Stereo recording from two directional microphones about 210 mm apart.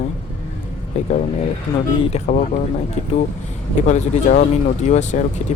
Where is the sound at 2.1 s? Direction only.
30° left (ahead or behind).